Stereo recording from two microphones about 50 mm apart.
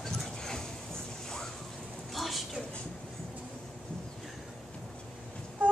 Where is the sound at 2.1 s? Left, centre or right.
Centre.